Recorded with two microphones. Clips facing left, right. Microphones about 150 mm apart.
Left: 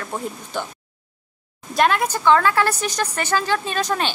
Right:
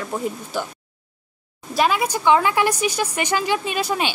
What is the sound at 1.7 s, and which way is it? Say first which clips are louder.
A woman's voice: left 1 dB; 5° right (ahead or behind).